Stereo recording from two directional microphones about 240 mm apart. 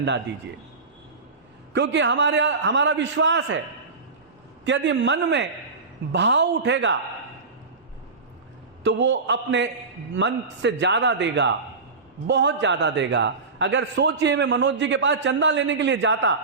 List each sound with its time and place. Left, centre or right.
1.7 s a man's voice: right
4.6 s a man's voice: right
8.8 s a man's voice: right